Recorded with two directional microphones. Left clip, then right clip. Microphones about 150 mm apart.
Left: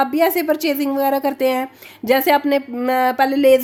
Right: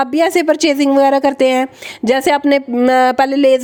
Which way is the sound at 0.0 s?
55° right (ahead or behind).